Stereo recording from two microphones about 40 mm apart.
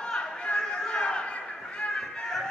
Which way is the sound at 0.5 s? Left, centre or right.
Left.